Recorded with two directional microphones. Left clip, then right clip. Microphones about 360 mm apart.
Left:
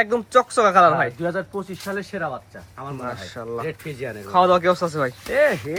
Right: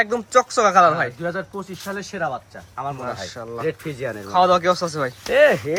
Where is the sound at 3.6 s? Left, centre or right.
Right.